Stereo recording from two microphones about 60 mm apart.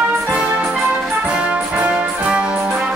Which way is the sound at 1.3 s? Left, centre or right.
Right.